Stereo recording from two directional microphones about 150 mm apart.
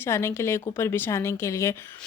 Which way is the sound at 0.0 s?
15° left (ahead or behind).